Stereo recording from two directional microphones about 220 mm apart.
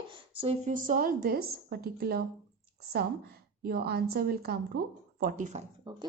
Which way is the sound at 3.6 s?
45° right (ahead or behind).